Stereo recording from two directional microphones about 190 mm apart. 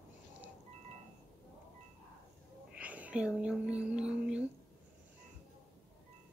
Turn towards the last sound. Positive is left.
turn(degrees=-5)  # may be behind; listen again after turning